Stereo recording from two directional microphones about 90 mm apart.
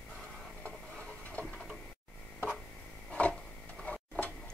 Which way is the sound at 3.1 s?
15° left (ahead or behind).